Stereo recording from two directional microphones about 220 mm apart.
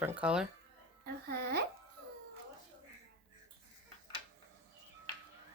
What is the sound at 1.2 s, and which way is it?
Speech, 45° right (ahead or behind).